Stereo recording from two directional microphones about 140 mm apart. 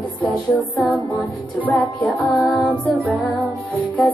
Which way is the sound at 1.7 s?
5° left (ahead or behind).